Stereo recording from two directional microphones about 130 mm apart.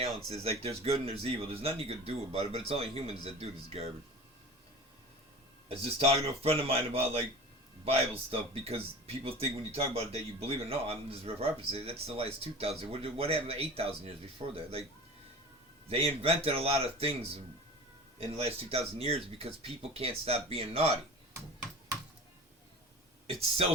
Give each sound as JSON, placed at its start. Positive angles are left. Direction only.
{"t": 0.3, "sound": "a man's voice", "side_deg": -50}
{"t": 5.6, "sound": "a man's voice", "side_deg": -50}
{"t": 15.9, "sound": "a man's voice", "side_deg": -50}
{"t": 21.3, "sound": "a sound", "side_deg": -25}
{"t": 23.2, "sound": "a man's voice", "side_deg": -50}